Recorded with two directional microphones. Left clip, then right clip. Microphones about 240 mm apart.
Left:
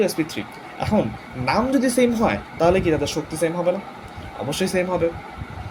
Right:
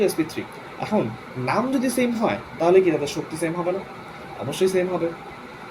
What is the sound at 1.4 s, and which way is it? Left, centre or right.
Speech, left.